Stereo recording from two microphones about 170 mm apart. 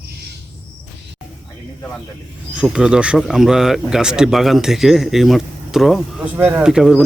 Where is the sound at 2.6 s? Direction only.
5° right (ahead or behind).